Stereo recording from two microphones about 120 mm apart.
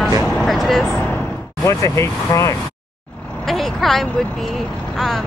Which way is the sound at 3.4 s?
Centre (ahead or behind).